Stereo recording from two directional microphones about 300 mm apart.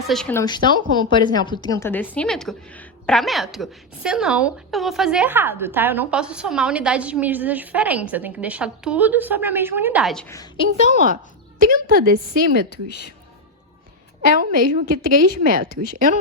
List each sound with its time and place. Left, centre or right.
0.1 s a woman's voice: centre
11.6 s a woman's voice: right
14.2 s a woman's voice: right